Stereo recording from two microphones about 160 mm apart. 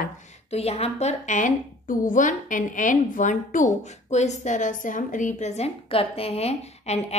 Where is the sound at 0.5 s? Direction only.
40° left (ahead or behind).